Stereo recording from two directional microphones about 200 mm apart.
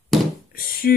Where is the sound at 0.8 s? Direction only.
50° left (ahead or behind).